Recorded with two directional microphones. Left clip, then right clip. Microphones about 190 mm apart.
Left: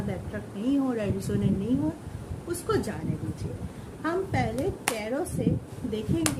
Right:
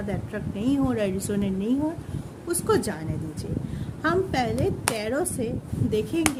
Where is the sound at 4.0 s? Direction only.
60° right (ahead or behind).